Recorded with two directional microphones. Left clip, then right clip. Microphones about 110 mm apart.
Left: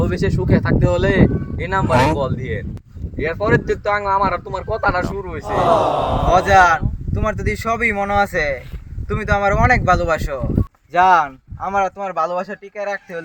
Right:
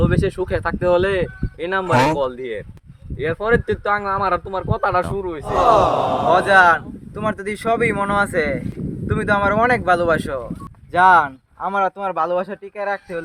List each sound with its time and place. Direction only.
0.0 s speech: 15° right (ahead or behind); by 2.2 s centre (ahead or behind)
2.2 s speech: 15° right (ahead or behind)
5.5 s speech: centre (ahead or behind)
6.3 s speech: 20° right (ahead or behind)